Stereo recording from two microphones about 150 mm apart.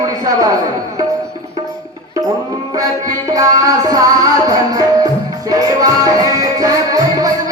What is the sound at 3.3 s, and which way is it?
Music, 25° right (ahead or behind).